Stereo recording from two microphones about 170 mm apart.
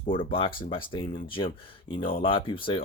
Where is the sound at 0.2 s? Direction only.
30° left (ahead or behind).